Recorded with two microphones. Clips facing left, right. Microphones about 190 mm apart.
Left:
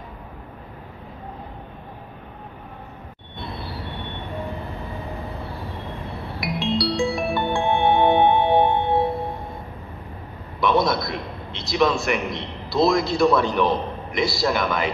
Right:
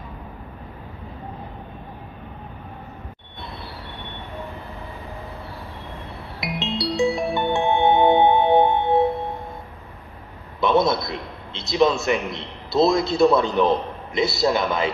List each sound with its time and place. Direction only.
6.4 s music: 20° right (ahead or behind)
10.6 s a man's voice: 25° right (ahead or behind)